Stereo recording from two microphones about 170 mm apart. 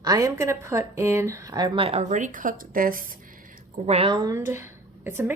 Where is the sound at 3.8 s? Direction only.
35° right (ahead or behind).